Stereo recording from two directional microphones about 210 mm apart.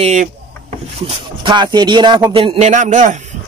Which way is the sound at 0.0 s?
35° right (ahead or behind).